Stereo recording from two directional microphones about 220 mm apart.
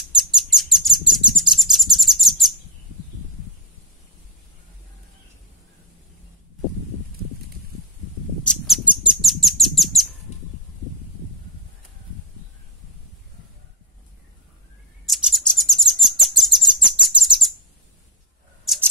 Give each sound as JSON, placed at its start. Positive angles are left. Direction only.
{"t": 0.0, "sound": "bird", "side_deg": 0}
{"t": 8.5, "sound": "bird", "side_deg": 0}
{"t": 10.3, "sound": "a sound", "side_deg": 30}
{"t": 15.0, "sound": "bird", "side_deg": 0}
{"t": 18.7, "sound": "scissors", "side_deg": 0}